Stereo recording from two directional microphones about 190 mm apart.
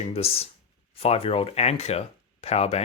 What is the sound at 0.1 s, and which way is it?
Speech, 30° left (ahead or behind).